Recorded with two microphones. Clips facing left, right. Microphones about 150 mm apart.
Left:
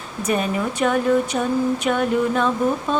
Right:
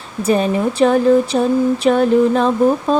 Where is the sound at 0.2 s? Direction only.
30° right (ahead or behind).